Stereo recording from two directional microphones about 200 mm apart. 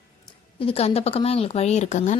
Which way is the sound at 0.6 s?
30° left (ahead or behind).